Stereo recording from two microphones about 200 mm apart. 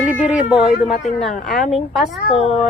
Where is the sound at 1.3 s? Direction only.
40° left (ahead or behind).